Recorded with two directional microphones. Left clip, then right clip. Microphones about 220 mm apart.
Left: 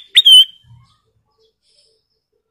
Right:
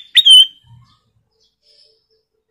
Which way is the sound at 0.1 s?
10° left (ahead or behind).